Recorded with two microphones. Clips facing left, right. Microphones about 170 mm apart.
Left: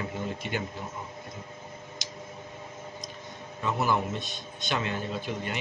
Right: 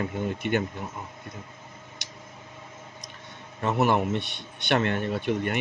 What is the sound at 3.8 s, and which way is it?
A man's voice, 70° right (ahead or behind).